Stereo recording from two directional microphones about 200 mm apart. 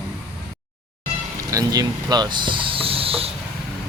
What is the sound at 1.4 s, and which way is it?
Speech, 15° right (ahead or behind).